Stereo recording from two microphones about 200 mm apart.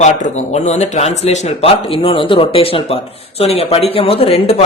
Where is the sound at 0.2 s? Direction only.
35° left (ahead or behind).